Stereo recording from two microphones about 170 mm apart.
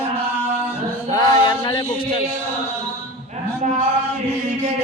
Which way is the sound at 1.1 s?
20° left (ahead or behind).